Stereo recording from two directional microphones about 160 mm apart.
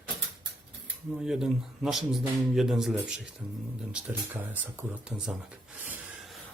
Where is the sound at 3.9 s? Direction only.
10° right (ahead or behind).